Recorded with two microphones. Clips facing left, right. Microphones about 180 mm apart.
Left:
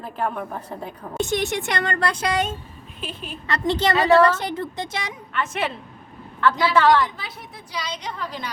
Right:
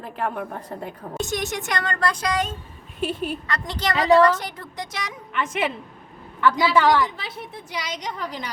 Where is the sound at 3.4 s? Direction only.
25° left (ahead or behind).